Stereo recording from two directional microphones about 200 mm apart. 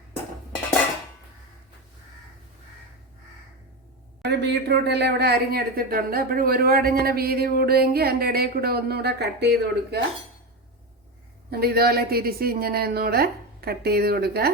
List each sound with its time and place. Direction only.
4.2 s speech: 55° right (ahead or behind)
11.5 s speech: 50° right (ahead or behind)